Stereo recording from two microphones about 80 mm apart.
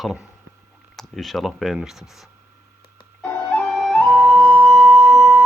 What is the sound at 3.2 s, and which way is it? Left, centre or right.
Flute, centre.